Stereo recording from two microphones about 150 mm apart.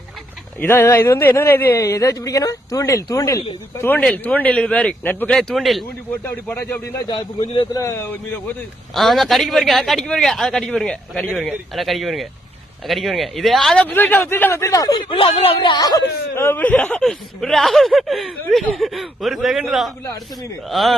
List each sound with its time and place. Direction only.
0.6 s a man's voice: 15° left (ahead or behind)
3.8 s a man's voice: 10° left (ahead or behind)
6.2 s a man's voice: 15° left (ahead or behind)
7.1 s a man's voice: 30° left (ahead or behind)
7.7 s a man's voice: 20° left (ahead or behind)
9.0 s a man's voice: centre (ahead or behind); by 14.9 s 25° left (ahead or behind)
14.9 s speech: 35° left (ahead or behind); by 20.9 s centre (ahead or behind)